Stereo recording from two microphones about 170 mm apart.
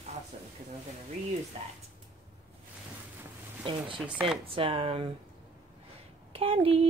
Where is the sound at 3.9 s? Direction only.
5° right (ahead or behind).